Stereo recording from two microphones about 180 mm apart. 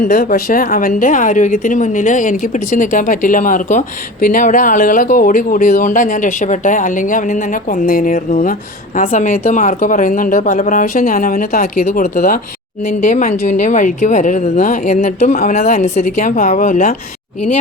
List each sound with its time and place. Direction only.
0.0 s a woman's voice: 50° left (ahead or behind)